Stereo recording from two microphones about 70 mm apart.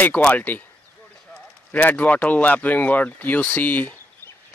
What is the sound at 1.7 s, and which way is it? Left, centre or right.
Speech, left.